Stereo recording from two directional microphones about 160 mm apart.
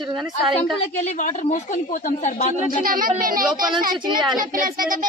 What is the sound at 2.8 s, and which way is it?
Child singing, 60° right (ahead or behind).